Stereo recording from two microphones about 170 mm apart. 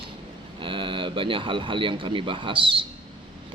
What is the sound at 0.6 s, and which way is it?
Speech, 30° right (ahead or behind).